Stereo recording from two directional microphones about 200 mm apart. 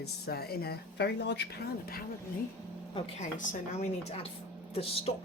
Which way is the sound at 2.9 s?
35° left (ahead or behind).